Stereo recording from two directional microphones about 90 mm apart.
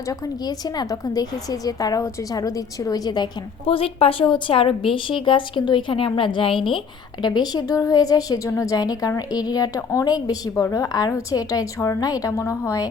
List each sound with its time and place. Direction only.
0.1 s a woman's voice: 50° left (ahead or behind)
3.7 s a woman's voice: 90° left; by 6.6 s 70° left (ahead or behind)
6.7 s speech: 55° left (ahead or behind)
7.5 s a woman's voice: 40° left (ahead or behind)
8.4 s a woman's voice: 30° left (ahead or behind)
8.7 s a woman's voice: 45° left (ahead or behind)